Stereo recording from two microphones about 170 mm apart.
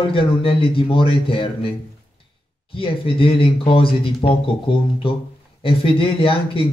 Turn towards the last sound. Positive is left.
turn(degrees=30)  # may be behind; listen again after turning